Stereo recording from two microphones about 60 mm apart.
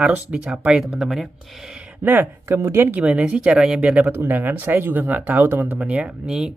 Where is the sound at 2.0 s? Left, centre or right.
Right.